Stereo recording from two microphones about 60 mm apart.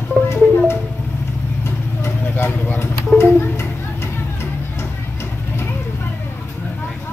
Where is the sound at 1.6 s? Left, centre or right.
Left.